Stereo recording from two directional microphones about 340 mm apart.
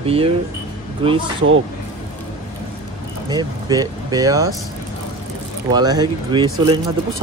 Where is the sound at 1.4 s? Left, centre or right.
Right.